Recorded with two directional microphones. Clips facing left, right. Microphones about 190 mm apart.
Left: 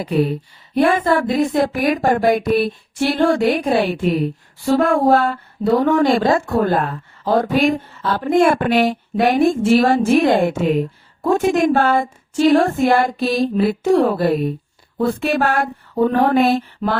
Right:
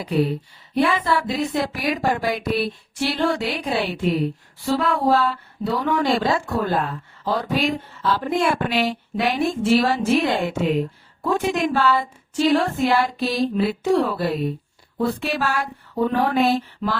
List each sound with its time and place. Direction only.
0.0 s speech: 50° left (ahead or behind)